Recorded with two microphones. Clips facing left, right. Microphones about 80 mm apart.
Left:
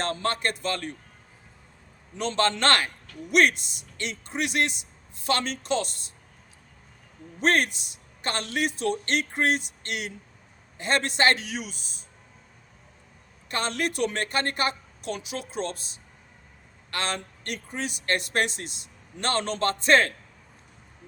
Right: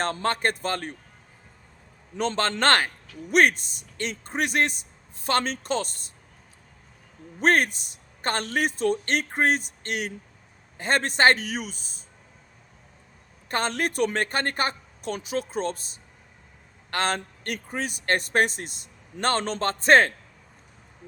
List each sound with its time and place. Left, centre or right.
0.0 s speech: right
2.1 s speech: right
7.4 s speech: right
13.5 s speech: right
16.9 s speech: right